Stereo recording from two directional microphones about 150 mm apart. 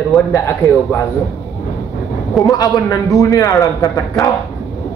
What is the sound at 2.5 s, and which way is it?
A man's voice, 25° left (ahead or behind).